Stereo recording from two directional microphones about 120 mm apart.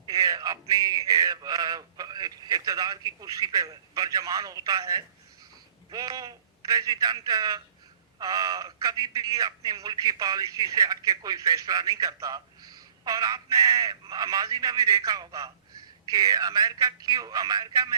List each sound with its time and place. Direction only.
0.1 s a man's voice: 30° right (ahead or behind)